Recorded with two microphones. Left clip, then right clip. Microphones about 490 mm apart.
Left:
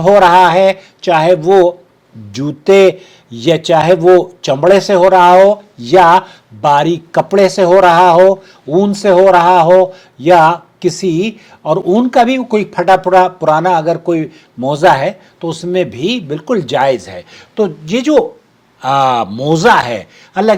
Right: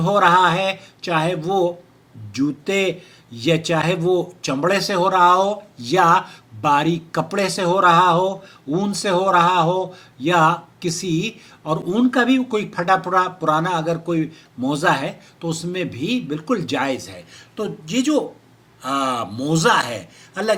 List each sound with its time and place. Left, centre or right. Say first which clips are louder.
0.0 s speech: left 9 dB; left